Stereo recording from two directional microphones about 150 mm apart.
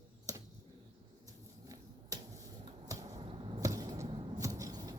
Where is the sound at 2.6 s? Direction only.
25° right (ahead or behind).